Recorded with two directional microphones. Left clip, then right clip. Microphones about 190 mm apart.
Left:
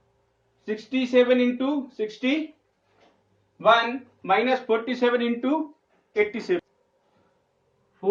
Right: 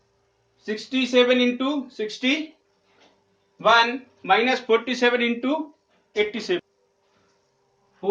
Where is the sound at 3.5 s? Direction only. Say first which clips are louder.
Right 2 dB; 15° right (ahead or behind).